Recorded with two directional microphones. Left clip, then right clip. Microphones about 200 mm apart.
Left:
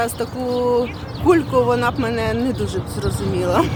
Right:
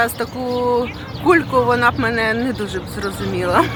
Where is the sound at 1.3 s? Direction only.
Centre (ahead or behind).